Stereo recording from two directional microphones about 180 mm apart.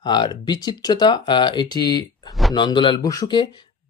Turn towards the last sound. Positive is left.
turn(degrees=25)  # may be behind; listen again after turning